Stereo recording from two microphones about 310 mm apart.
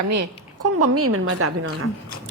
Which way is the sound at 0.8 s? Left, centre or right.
Right.